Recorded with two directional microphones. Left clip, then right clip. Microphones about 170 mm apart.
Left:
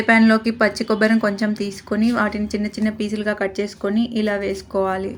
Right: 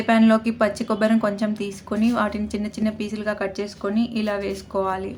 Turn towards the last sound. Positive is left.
turn(degrees=20)  # may be behind; listen again after turning